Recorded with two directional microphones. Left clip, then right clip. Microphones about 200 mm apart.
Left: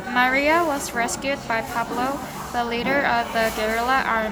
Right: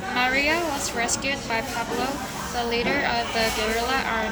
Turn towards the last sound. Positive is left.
turn(degrees=20)  # may be behind; listen again after turning